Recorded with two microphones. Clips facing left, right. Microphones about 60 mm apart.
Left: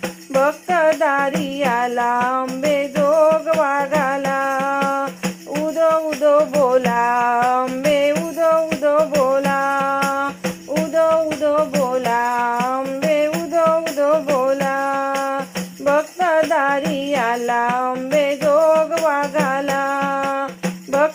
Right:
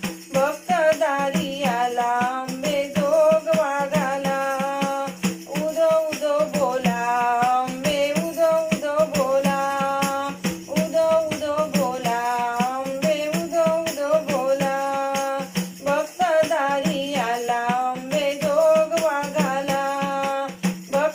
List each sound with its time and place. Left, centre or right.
0.3 s music: left
3.5 s music: left
5.8 s music: left
8.1 s music: left
9.4 s music: left
17.2 s jingle bell: left
18.2 s music: left